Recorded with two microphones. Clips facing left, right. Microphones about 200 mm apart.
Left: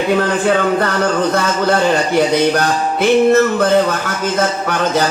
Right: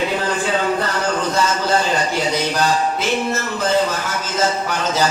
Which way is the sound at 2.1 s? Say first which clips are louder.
Left 7 dB; 60° left (ahead or behind).